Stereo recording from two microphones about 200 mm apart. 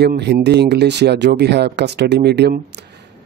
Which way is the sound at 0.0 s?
55° right (ahead or behind).